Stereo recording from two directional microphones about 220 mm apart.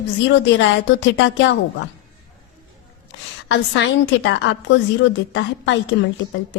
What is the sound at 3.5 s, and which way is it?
A woman's voice, 55° left (ahead or behind).